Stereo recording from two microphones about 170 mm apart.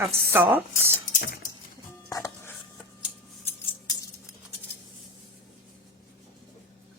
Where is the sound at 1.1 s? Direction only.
50° left (ahead or behind).